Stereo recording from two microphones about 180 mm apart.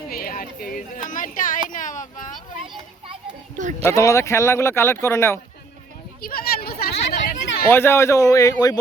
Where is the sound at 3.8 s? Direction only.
15° left (ahead or behind).